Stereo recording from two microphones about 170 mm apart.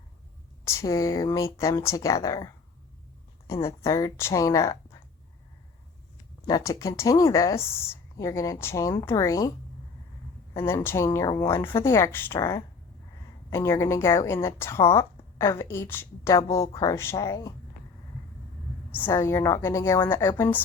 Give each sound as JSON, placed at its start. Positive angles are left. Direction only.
{"t": 0.6, "sound": "a woman's voice", "side_deg": 15}
{"t": 6.5, "sound": "a woman's voice", "side_deg": 20}
{"t": 10.5, "sound": "a woman's voice", "side_deg": 15}
{"t": 18.9, "sound": "a woman's voice", "side_deg": 15}